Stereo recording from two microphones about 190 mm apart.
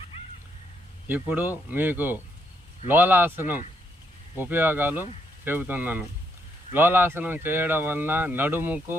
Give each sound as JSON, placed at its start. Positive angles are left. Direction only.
{"t": 1.0, "sound": "speech", "side_deg": -10}